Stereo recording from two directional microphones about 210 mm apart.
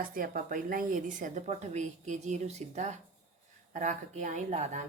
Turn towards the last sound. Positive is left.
turn(degrees=-35)  # may be behind; listen again after turning